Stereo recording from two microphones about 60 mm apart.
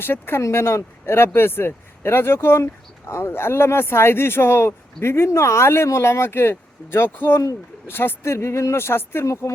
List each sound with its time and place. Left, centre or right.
0.0 s speech: left
9.2 s a woman's voice: left